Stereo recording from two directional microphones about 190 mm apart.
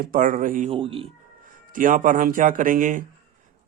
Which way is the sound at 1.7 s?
45° right (ahead or behind).